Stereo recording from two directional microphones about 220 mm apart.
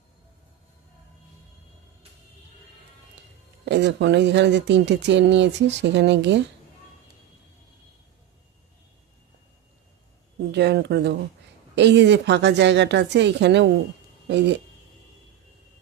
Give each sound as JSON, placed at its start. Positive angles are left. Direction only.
{"t": 3.6, "sound": "speech", "side_deg": -55}
{"t": 10.5, "sound": "speech", "side_deg": -50}